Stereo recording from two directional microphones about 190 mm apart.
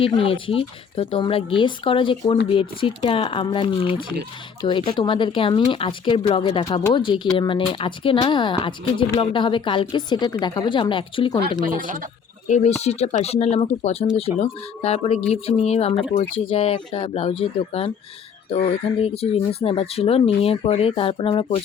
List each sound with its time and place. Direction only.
0.0 s speech: 30° left (ahead or behind)
11.6 s speech: 45° right (ahead or behind)
12.5 s speech: 40° left (ahead or behind)